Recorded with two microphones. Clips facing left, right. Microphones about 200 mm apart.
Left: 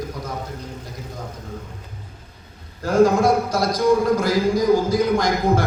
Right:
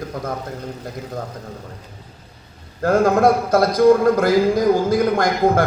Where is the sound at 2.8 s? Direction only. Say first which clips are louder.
Even; 55° right (ahead or behind).